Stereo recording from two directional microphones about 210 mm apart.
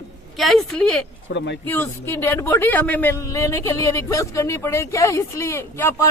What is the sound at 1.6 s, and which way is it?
Speech, 10° left (ahead or behind).